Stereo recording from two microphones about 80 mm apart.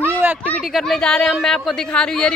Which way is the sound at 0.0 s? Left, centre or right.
Right.